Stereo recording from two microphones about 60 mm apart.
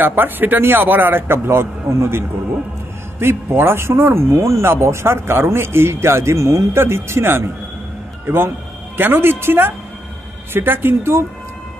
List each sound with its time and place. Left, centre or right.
0.0 s a man's voice: right